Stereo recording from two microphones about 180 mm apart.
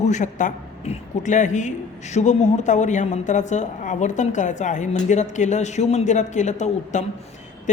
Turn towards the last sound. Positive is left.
turn(degrees=40)  # may be behind; listen again after turning